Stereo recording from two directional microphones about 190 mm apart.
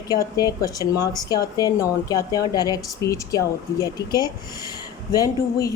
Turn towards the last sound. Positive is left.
turn(degrees=20)  # may be behind; listen again after turning